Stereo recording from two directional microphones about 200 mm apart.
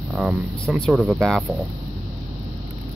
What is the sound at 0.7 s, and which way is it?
Speech, 5° right (ahead or behind).